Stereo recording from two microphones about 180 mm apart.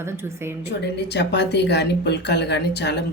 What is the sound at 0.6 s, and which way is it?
A woman's voice, 70° left (ahead or behind).